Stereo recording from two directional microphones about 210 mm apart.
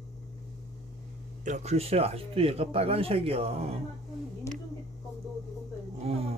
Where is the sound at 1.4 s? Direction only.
35° right (ahead or behind).